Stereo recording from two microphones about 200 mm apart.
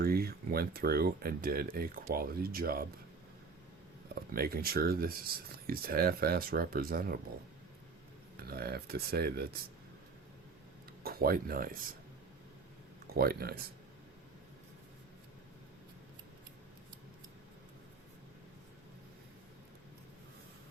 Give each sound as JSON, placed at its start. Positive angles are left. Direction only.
{"t": 0.0, "sound": "speech", "side_deg": -50}
{"t": 4.4, "sound": "speech", "side_deg": -50}
{"t": 8.4, "sound": "speech", "side_deg": -50}
{"t": 11.0, "sound": "speech", "side_deg": -50}
{"t": 13.1, "sound": "speech", "side_deg": -50}